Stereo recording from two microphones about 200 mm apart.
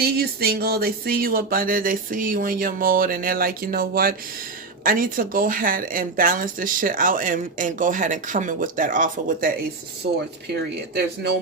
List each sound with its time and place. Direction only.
0.0 s speech: 50° right (ahead or behind)
10.0 s speech: 55° right (ahead or behind)